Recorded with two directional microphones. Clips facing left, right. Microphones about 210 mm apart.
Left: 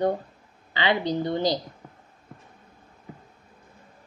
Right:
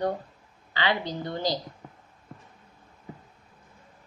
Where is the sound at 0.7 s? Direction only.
20° left (ahead or behind).